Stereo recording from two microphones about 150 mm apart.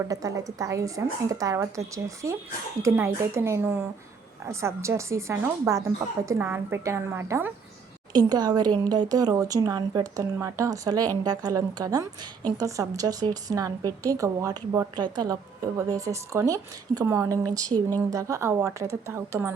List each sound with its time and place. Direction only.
0.0 s a woman's voice: 20° right (ahead or behind)
8.1 s a woman's voice: 25° right (ahead or behind)